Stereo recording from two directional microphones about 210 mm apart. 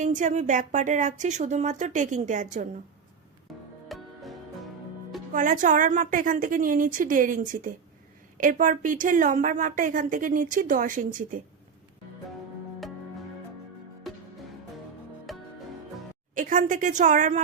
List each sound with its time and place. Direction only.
0.0 s a woman's voice: 35° right (ahead or behind)
3.5 s music: centre (ahead or behind)
5.3 s a woman's voice: 40° right (ahead or behind)
15.3 s music: centre (ahead or behind)
16.3 s a woman's voice: 40° right (ahead or behind)